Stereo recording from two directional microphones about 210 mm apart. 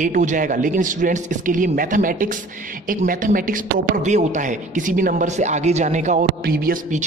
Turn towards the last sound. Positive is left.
turn(degrees=-40)  # may be behind; listen again after turning